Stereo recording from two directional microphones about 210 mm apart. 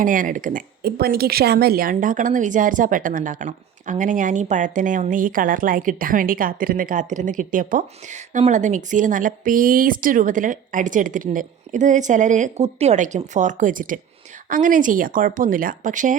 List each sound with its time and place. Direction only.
0.0 s speech: 40° right (ahead or behind)